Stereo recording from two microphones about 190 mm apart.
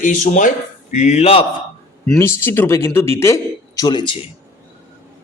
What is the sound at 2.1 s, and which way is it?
Speech, 15° left (ahead or behind).